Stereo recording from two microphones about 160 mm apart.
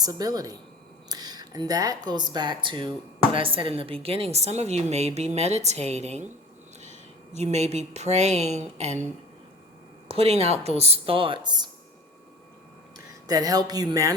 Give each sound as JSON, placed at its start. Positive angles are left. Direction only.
{"t": 0.0, "sound": "a woman's voice", "side_deg": -25}
{"t": 10.1, "sound": "speech", "side_deg": -40}
{"t": 13.2, "sound": "speech", "side_deg": -25}